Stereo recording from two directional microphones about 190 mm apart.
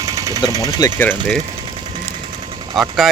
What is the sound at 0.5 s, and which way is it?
Speech, 20° right (ahead or behind).